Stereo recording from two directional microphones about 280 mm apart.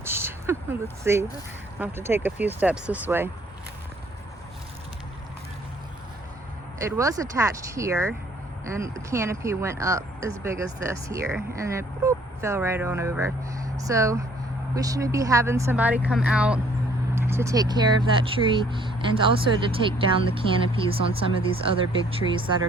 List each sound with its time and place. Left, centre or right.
0.0 s a sound: centre
1.8 s speech: centre
6.7 s speech: centre